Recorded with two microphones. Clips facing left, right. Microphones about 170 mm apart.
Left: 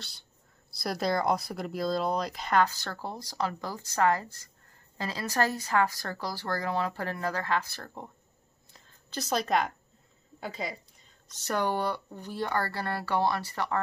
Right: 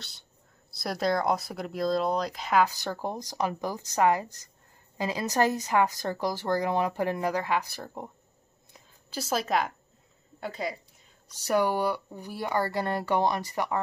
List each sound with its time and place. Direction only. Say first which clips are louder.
0.7 s a woman's voice: right 2 dB; centre (ahead or behind)
11.2 s a woman's voice: right 4 dB; 10° right (ahead or behind)